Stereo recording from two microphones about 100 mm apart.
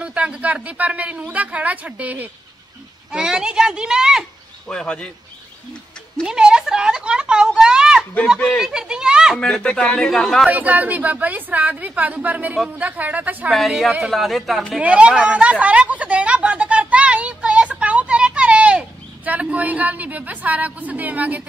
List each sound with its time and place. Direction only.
0.0 s speech: 10° right (ahead or behind)
4.6 s speech: 10° left (ahead or behind)
6.2 s a sound: 10° right (ahead or behind)
8.4 s speech: centre (ahead or behind)
9.4 s speech: 10° left (ahead or behind)
10.4 s speech: 15° right (ahead or behind)
13.5 s a woman's voice: centre (ahead or behind)
14.8 s speech: 15° right (ahead or behind)
15.6 s a sound: 15° right (ahead or behind)